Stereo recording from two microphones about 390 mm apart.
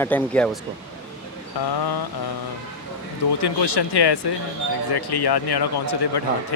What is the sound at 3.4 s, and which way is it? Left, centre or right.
Speech, left.